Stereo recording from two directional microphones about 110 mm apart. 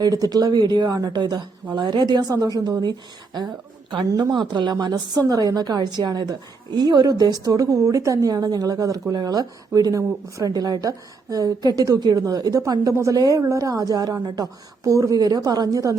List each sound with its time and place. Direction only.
0.0 s a woman's voice: 35° right (ahead or behind)
4.1 s a woman's voice: 40° right (ahead or behind)